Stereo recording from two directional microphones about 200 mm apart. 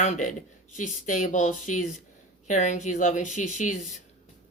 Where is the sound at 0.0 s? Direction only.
35° left (ahead or behind).